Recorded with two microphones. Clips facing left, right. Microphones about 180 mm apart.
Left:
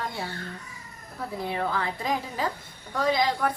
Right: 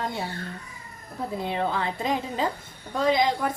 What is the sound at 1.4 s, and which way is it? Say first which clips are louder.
A woman's voice: right 1 dB; 20° right (ahead or behind).